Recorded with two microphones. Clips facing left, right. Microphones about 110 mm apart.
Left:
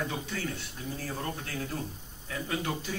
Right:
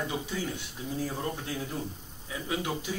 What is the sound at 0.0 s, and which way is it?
Speech, 10° right (ahead or behind).